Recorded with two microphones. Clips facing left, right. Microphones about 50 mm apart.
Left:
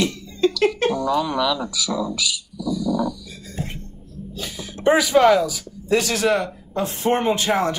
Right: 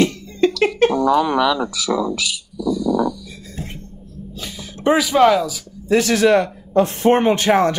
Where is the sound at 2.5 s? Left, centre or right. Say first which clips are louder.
Right 5 dB; right.